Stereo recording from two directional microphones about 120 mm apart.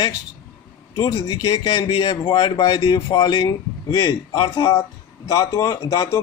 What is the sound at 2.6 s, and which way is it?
Speech, 30° left (ahead or behind).